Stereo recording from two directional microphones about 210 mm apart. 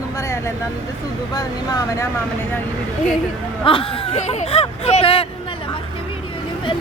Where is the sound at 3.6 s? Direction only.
25° left (ahead or behind).